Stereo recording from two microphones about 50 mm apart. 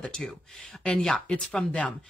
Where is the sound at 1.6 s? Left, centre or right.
Left.